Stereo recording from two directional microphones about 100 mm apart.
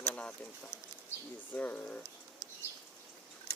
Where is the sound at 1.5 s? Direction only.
15° left (ahead or behind).